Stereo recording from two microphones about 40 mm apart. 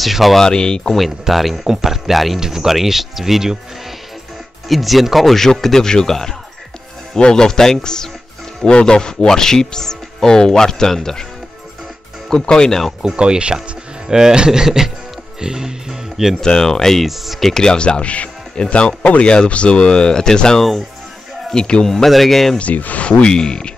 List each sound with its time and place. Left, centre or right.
0.0 s speech: centre
0.4 s speech: centre
1.3 s speech: centre
4.6 s speech: centre
12.3 s speech: left
13.0 s speech: right
15.4 s music: centre
16.3 s speech: centre
17.0 s speech: centre
17.5 s speech: centre
17.7 s speech: left; by 22.6 s centre
22.6 s speech: left
23.0 s speech: left